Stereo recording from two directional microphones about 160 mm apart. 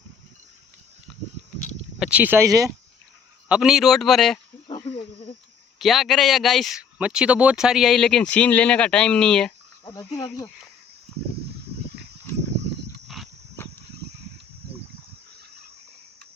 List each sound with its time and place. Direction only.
2.0 s speech: 10° right (ahead or behind)
3.5 s speech: centre (ahead or behind)
4.9 s a sound: 40° left (ahead or behind)
5.8 s speech: centre (ahead or behind)
9.8 s cricket: 25° left (ahead or behind)
13.2 s wild animals: centre (ahead or behind)